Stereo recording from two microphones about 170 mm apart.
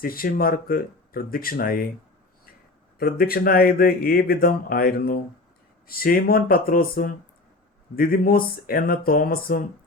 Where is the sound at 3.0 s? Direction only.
60° left (ahead or behind).